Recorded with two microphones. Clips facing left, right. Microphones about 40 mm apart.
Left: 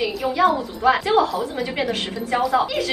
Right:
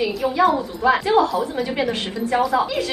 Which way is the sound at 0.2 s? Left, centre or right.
Centre.